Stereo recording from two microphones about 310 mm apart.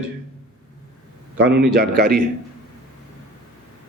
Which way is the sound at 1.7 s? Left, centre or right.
Right.